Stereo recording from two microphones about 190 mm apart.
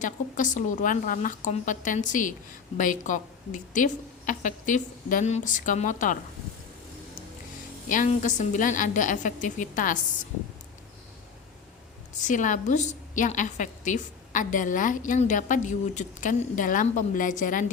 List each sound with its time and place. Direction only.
0.0 s a woman's voice: 40° left (ahead or behind)
7.9 s a woman's voice: 40° left (ahead or behind)
12.2 s a woman's voice: 40° left (ahead or behind)